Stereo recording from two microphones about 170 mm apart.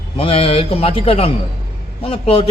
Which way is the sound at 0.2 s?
35° left (ahead or behind).